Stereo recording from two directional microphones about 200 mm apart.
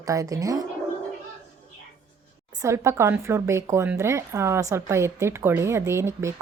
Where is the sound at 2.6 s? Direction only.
15° right (ahead or behind).